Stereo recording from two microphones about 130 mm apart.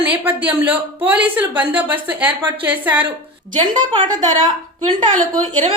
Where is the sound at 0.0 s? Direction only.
15° right (ahead or behind).